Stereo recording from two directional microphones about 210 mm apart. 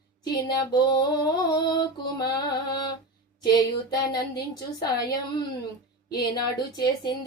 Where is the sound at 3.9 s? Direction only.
20° left (ahead or behind).